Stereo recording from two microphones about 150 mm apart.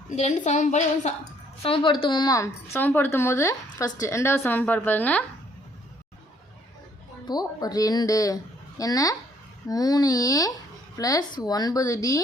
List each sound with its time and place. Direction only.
0.2 s a woman's voice: 55° left (ahead or behind)
1.6 s a woman's voice: 35° left (ahead or behind)
2.7 s speech: 15° left (ahead or behind)
7.3 s speech: 25° left (ahead or behind)